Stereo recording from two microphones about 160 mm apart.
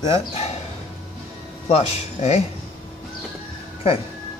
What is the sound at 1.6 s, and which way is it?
Speech, 40° left (ahead or behind).